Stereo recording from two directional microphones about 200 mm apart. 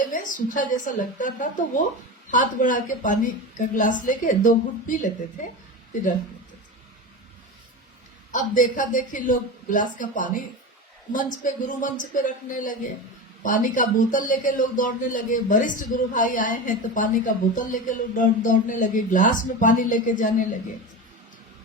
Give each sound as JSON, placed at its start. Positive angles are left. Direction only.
{"t": 0.1, "sound": "a man's voice", "side_deg": 40}
{"t": 8.3, "sound": "a man's voice", "side_deg": 40}